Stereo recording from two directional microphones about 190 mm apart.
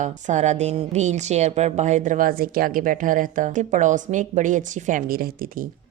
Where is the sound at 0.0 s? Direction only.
40° right (ahead or behind).